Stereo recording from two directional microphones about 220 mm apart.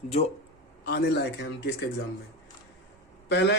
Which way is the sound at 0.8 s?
50° left (ahead or behind).